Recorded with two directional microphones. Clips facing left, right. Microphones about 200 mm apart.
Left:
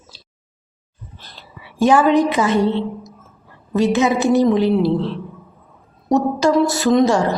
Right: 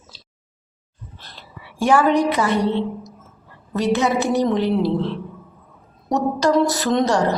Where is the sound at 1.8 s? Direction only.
15° left (ahead or behind).